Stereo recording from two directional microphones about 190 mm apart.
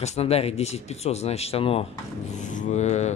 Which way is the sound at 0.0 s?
35° left (ahead or behind).